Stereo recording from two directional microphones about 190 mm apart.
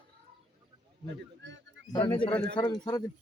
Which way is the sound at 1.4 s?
70° right (ahead or behind).